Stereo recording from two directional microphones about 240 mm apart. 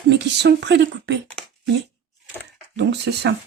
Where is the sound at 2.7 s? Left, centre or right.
Right.